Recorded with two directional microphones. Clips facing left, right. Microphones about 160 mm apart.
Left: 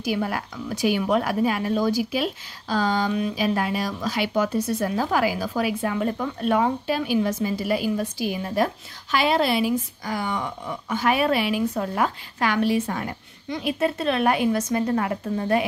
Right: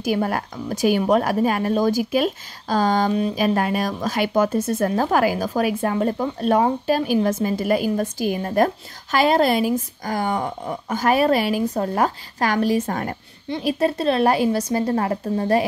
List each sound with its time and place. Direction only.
0.0 s a woman's voice: 45° right (ahead or behind)
13.5 s speech: 35° right (ahead or behind)